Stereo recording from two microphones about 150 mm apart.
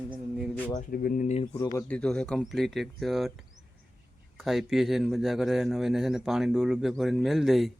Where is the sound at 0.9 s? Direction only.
75° left (ahead or behind).